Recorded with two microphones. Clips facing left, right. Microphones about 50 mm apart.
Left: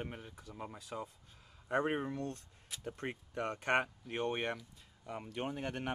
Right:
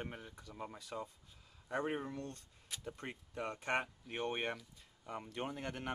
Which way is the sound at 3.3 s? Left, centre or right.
Left.